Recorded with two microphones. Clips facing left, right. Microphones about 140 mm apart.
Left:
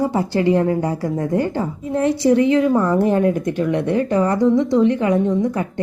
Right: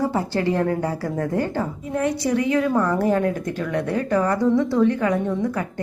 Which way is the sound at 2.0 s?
30° left (ahead or behind).